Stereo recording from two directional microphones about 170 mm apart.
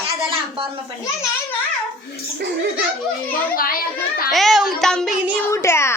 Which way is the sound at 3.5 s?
60° left (ahead or behind).